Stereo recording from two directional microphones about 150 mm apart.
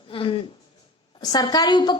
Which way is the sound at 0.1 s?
35° left (ahead or behind).